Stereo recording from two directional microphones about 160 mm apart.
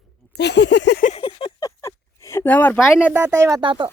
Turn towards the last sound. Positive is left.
turn(degrees=-30)  # may be behind; listen again after turning